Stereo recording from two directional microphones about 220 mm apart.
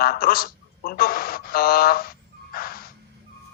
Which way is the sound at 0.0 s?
40° left (ahead or behind).